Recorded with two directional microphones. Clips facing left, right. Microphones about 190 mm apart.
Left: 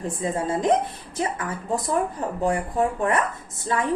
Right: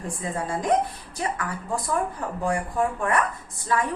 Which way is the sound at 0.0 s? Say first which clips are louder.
Left 4 dB; 20° left (ahead or behind).